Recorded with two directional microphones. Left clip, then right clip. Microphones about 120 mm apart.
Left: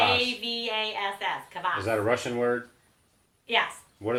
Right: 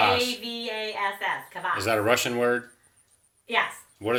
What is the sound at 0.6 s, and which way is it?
Speech, 20° left (ahead or behind).